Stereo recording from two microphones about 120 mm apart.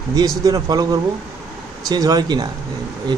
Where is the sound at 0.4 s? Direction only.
30° right (ahead or behind).